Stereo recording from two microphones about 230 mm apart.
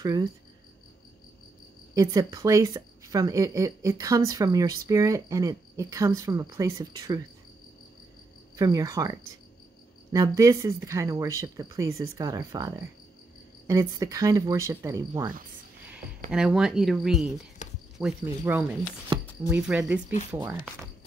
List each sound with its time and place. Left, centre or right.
0.0 s a woman's voice: centre
2.0 s a woman's voice: centre
8.5 s a woman's voice: centre
10.1 s a woman's voice: centre
16.3 s speech: centre
17.6 s a sound: left
17.9 s a woman's voice: centre
19.1 s a sound: right
19.4 s a woman's voice: centre